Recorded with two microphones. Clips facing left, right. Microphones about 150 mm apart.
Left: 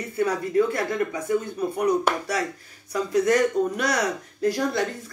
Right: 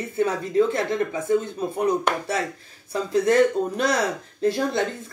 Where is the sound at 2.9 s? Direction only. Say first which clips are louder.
Right 2 dB; 25° right (ahead or behind).